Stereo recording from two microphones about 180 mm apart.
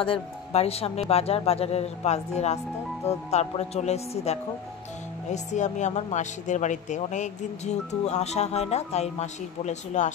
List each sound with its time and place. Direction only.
0.0 s speech: 35° left (ahead or behind)